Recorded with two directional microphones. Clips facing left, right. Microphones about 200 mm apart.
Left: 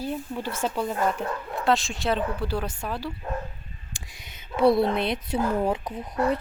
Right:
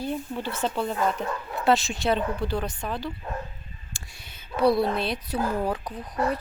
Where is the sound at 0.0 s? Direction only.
5° left (ahead or behind).